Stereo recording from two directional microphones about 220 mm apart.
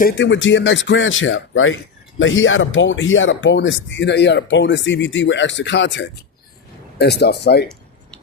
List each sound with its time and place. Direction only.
0.0 s speech: 55° left (ahead or behind)